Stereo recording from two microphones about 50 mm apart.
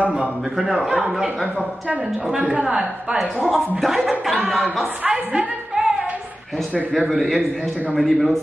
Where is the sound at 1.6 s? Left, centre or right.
Right.